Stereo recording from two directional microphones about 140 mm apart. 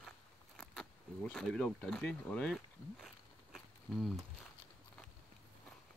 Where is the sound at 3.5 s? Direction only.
Centre (ahead or behind).